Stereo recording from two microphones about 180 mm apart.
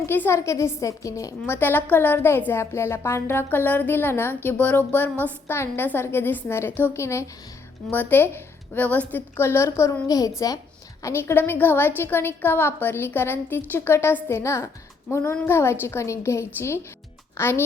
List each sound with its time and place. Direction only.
0.0 s a woman's voice: 15° left (ahead or behind)